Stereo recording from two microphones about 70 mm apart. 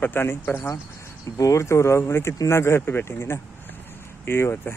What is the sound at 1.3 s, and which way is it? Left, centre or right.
Speech, left.